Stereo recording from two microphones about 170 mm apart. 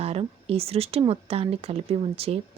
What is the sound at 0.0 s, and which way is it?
Speech, 35° right (ahead or behind).